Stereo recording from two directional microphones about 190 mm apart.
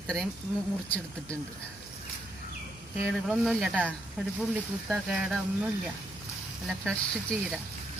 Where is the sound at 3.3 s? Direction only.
Centre (ahead or behind).